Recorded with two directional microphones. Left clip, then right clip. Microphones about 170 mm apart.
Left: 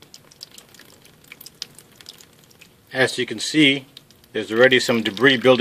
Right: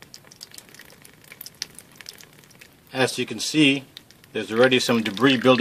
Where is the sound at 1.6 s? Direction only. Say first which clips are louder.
Right 2 dB; 20° left (ahead or behind).